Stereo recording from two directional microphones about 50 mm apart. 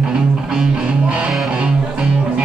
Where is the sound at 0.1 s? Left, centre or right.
Centre.